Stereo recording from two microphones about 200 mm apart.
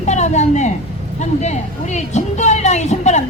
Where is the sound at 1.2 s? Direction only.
35° left (ahead or behind).